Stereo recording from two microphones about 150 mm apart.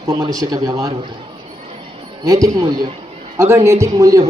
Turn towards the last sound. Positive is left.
turn(degrees=-25)  # may be behind; listen again after turning